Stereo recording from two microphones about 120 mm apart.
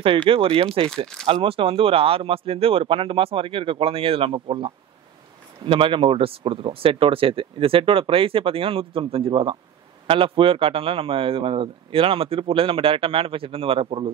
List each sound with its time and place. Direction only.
0.3 s a man's voice: 50° right (ahead or behind)
0.8 s speech: 5° left (ahead or behind)
1.2 s a man's voice: 50° right (ahead or behind)